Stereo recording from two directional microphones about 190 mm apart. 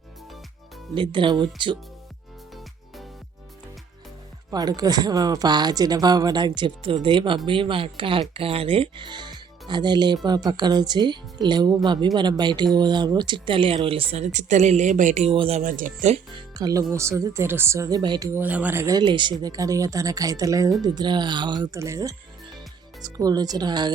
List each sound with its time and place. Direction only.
0.9 s speech: 25° right (ahead or behind)
4.5 s speech: 20° right (ahead or behind)
15.6 s speech: 45° right (ahead or behind)
16.3 s speech: 20° right (ahead or behind)
18.3 s speech: 10° right (ahead or behind)